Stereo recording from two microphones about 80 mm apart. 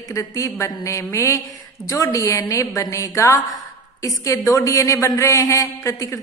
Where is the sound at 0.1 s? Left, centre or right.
Left.